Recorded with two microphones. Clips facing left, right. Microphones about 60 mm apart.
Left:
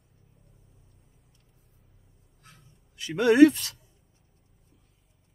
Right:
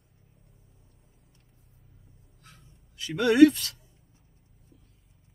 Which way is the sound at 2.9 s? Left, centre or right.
Left.